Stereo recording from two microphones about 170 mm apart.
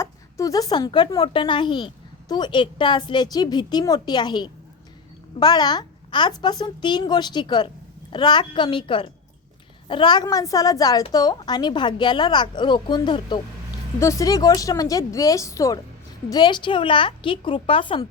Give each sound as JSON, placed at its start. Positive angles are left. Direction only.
{"t": 0.0, "sound": "speech", "side_deg": 20}